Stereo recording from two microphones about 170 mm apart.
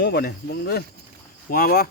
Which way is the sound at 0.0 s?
70° left (ahead or behind).